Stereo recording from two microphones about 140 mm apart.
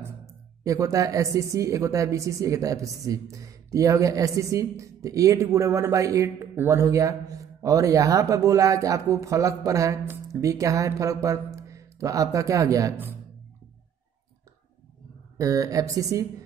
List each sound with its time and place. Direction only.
0.7 s a woman's voice: 25° right (ahead or behind)
15.3 s a woman's voice: 25° right (ahead or behind)